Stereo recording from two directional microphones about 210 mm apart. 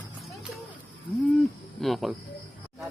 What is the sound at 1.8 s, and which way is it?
Speech, centre (ahead or behind).